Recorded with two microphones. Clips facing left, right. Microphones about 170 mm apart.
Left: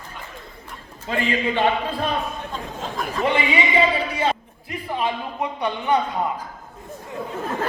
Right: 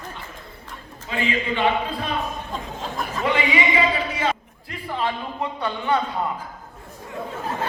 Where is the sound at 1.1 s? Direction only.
45° left (ahead or behind).